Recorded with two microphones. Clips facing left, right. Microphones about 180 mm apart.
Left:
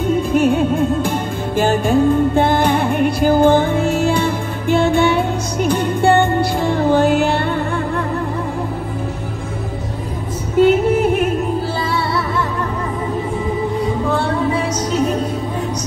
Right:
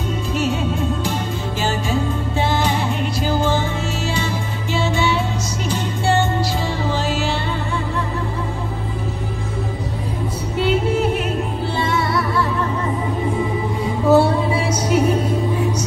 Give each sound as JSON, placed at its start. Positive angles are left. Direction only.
{"t": 0.3, "sound": "music", "side_deg": 55}
{"t": 10.6, "sound": "music", "side_deg": 50}
{"t": 14.1, "sound": "music", "side_deg": -10}